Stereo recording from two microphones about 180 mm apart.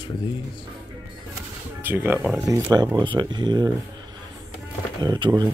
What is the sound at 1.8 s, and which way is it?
Speech, 10° right (ahead or behind).